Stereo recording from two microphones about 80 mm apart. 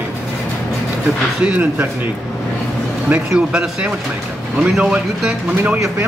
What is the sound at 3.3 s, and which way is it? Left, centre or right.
A man's voice, centre.